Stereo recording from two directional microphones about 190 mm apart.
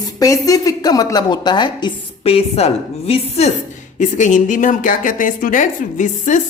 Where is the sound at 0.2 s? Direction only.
20° left (ahead or behind).